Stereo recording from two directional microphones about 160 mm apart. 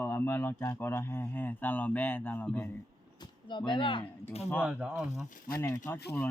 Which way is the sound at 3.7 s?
30° left (ahead or behind).